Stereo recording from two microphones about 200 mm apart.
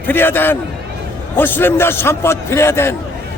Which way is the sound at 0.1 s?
10° left (ahead or behind).